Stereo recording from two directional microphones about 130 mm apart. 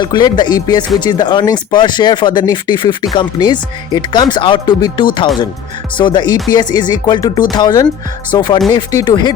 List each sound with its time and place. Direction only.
0.0 s speech: 35° left (ahead or behind)